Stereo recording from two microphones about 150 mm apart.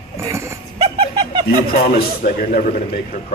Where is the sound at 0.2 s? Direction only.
20° right (ahead or behind).